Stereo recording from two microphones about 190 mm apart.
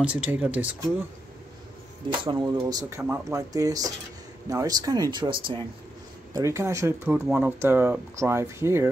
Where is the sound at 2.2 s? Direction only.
25° right (ahead or behind).